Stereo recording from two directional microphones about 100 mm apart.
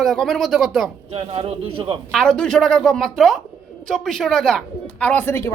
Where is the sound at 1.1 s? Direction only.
70° right (ahead or behind).